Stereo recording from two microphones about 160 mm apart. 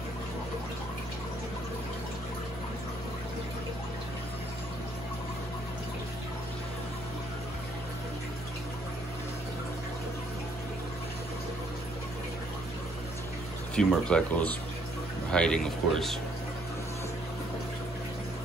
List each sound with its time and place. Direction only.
13.7 s speech: 5° left (ahead or behind)